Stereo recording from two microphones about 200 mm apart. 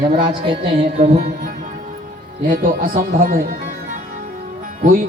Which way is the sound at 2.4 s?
45° right (ahead or behind).